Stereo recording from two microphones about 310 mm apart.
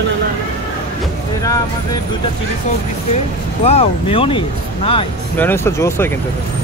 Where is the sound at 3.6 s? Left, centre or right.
Centre.